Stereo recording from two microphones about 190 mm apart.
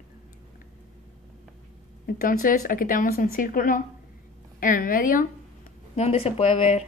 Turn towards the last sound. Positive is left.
turn(degrees=35)  # may be behind; listen again after turning